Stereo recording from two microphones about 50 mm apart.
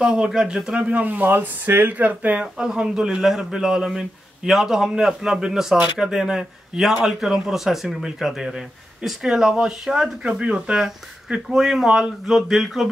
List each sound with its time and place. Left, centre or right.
0.0 s a man's voice: centre
1.0 s speech: right
2.4 s speech: centre
10.4 s a man's voice: centre